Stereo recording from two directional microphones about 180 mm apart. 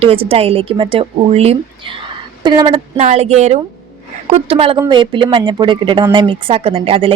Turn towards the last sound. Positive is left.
turn(degrees=-30)  # may be behind; listen again after turning